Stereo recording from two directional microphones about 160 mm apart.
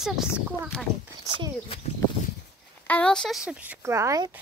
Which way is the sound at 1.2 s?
25° right (ahead or behind).